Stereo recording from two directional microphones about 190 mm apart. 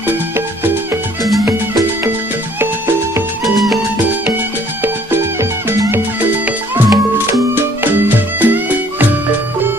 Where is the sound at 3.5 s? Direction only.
Centre (ahead or behind).